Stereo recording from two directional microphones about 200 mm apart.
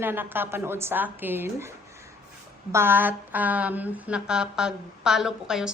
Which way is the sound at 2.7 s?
10° right (ahead or behind).